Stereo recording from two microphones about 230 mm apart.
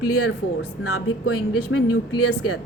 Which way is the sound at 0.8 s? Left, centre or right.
Left.